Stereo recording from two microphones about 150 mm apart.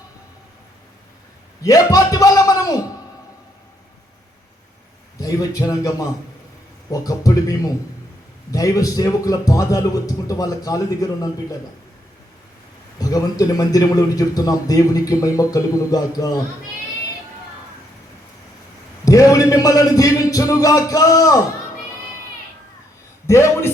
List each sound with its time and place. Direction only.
1.6 s a man's voice: 20° left (ahead or behind)
5.2 s a man's voice: 25° left (ahead or behind)
13.0 s a man's voice: 25° left (ahead or behind)
19.0 s a man's voice: 25° left (ahead or behind)
23.2 s a man's voice: 20° left (ahead or behind)